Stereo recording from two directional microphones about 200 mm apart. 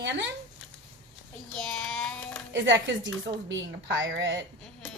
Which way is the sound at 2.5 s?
65° right (ahead or behind).